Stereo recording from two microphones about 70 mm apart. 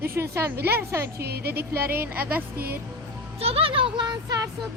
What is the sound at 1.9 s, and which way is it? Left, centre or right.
Speech, right.